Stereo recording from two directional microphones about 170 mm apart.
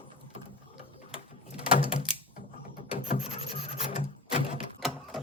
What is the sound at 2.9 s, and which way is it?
Filing, 35° left (ahead or behind).